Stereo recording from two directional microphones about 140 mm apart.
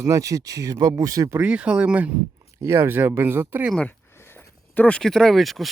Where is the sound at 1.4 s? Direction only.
10° right (ahead or behind).